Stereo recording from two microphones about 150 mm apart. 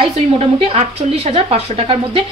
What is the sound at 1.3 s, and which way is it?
Speech, 40° right (ahead or behind).